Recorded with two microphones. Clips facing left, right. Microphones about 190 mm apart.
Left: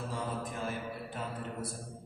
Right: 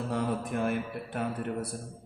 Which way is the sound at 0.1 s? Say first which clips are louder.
Right 7 dB; 65° right (ahead or behind).